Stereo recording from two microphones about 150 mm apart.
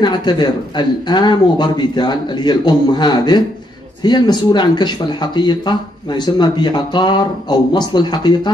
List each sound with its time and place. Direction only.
0.0 s speech: 30° left (ahead or behind)